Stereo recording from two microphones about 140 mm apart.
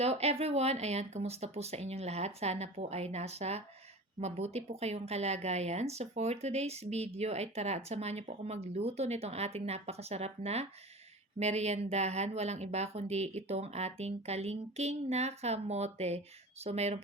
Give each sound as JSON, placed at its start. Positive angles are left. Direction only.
{"t": 0.0, "sound": "speech", "side_deg": -50}